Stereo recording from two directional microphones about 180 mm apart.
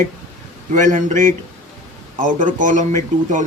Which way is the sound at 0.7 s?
45° right (ahead or behind).